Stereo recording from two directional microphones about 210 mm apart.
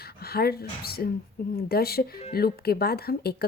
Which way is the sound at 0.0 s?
45° left (ahead or behind).